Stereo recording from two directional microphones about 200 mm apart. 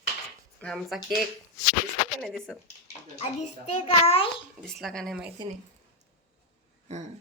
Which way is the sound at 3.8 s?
30° left (ahead or behind).